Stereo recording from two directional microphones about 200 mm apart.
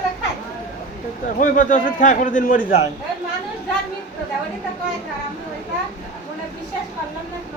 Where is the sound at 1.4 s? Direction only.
40° left (ahead or behind).